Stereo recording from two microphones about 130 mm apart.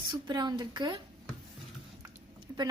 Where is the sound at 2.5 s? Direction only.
25° right (ahead or behind).